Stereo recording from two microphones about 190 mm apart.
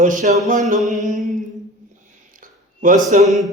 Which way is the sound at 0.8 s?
40° right (ahead or behind).